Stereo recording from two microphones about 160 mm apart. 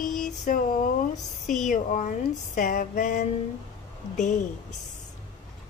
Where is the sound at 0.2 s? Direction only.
60° left (ahead or behind).